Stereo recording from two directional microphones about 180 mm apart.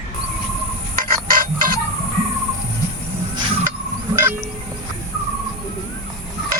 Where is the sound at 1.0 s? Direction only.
55° right (ahead or behind).